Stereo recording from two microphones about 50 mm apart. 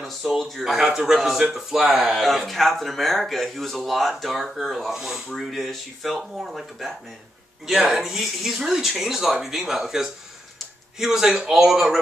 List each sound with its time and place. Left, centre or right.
0.3 s speech: centre
1.8 s speech: centre
2.0 s speech: centre
7.9 s speech: centre